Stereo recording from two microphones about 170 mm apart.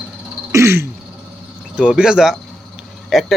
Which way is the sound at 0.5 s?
15° right (ahead or behind).